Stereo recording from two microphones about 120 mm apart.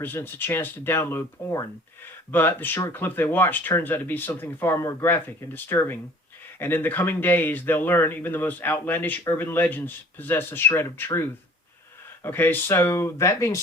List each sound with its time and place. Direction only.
0.0 s speech: 20° left (ahead or behind)